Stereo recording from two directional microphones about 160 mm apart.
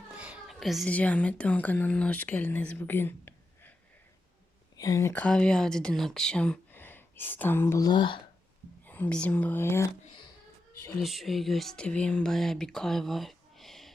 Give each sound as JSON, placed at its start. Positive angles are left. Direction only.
{"t": 0.2, "sound": "a sound", "side_deg": -5}
{"t": 0.9, "sound": "speech", "side_deg": 10}
{"t": 4.8, "sound": "speech", "side_deg": 20}
{"t": 8.9, "sound": "speech", "side_deg": 10}
{"t": 11.0, "sound": "speech", "side_deg": 0}